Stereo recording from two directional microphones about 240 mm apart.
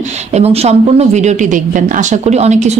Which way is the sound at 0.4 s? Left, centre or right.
Right.